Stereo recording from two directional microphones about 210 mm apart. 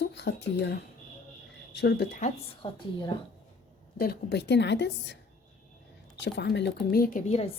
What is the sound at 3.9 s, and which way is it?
A woman's voice, 50° left (ahead or behind).